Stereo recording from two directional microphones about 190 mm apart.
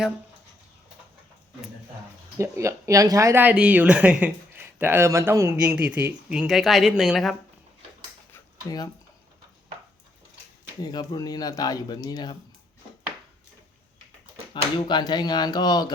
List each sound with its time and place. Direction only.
2.4 s speech: 15° right (ahead or behind); by 7.3 s centre (ahead or behind)
8.3 s dishes: 20° left (ahead or behind)
10.8 s speech: 20° left (ahead or behind)
14.5 s speech: 25° left (ahead or behind)